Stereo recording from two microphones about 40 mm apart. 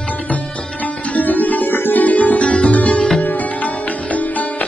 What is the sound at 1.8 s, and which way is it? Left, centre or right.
Music, left.